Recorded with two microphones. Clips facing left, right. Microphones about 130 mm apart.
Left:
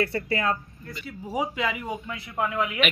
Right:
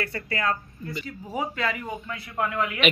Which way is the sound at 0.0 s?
25° left (ahead or behind).